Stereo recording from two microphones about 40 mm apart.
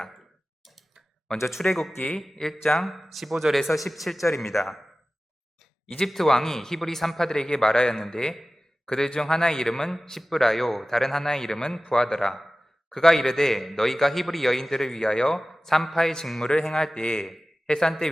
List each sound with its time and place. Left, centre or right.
1.6 s a man's voice: centre
2.0 s a man's voice: left
2.6 s a man's voice: centre
6.1 s a man's voice: centre
16.9 s a man's voice: left